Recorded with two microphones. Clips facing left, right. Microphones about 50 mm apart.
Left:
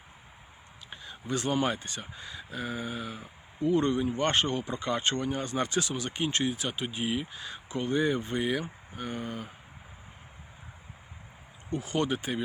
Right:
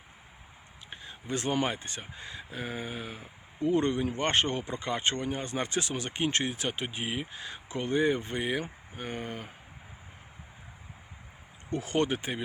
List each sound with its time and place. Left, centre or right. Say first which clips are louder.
0.9 s a sound: left 1 dB; right
1.6 s speech: left 2 dB; right
11.7 s speech: right 1 dB; right